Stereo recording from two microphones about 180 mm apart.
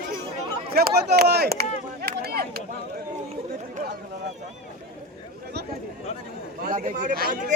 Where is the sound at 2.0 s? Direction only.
60° right (ahead or behind).